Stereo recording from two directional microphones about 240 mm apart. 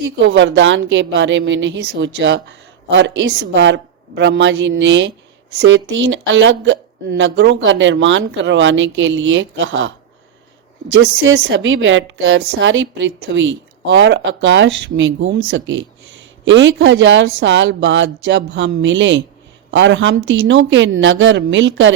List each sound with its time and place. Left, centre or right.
0.0 s a woman's voice: right
11.0 s a woman's voice: right